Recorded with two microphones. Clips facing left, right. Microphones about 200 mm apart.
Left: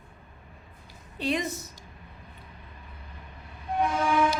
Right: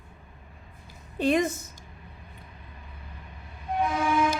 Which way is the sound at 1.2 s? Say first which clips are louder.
Right 5 dB; 50° right (ahead or behind).